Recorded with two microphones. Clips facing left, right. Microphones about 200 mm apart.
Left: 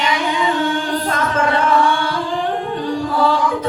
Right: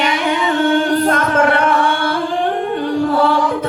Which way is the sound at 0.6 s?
60° right (ahead or behind).